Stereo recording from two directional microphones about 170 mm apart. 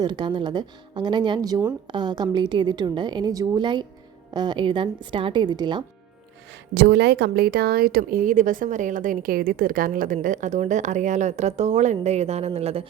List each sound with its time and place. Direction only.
0.0 s a woman's voice: 25° right (ahead or behind)
6.7 s speech: 80° right; by 12.9 s 35° right (ahead or behind)